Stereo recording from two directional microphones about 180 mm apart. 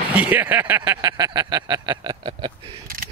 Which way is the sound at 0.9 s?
20° right (ahead or behind).